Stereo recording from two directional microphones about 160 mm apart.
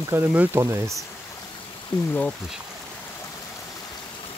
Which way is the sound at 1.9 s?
5° left (ahead or behind).